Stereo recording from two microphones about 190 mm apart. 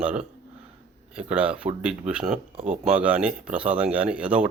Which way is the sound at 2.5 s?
35° right (ahead or behind).